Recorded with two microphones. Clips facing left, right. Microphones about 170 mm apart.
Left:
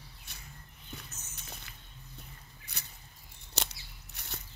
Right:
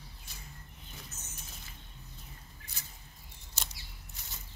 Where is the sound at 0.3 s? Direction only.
65° left (ahead or behind).